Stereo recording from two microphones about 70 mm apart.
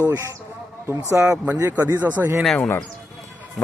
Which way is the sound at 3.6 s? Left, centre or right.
Centre.